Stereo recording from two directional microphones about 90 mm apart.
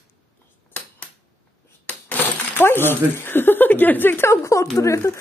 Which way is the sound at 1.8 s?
20° left (ahead or behind).